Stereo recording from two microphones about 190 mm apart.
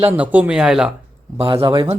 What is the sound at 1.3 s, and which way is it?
Speech, 30° right (ahead or behind).